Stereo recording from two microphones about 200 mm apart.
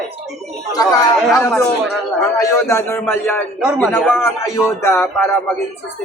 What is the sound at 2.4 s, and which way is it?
Speech, 15° left (ahead or behind).